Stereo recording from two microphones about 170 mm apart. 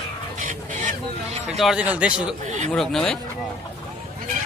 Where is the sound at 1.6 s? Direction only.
5° right (ahead or behind).